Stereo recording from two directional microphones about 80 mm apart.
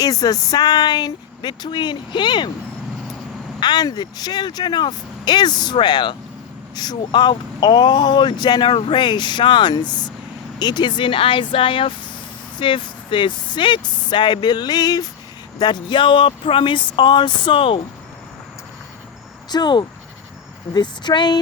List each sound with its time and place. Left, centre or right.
0.0 s speech: left
0.5 s speech: left
3.6 s speech: left
6.7 s speech: left
15.5 s speech: left
19.5 s speech: left